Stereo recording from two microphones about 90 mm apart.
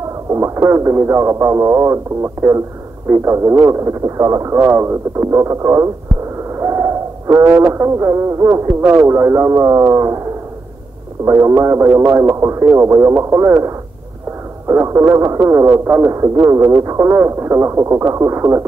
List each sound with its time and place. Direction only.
0.3 s speech: 30° right (ahead or behind)
6.6 s a sound: 30° right (ahead or behind)
8.8 s speech: 30° right (ahead or behind)
11.2 s speech: 30° right (ahead or behind)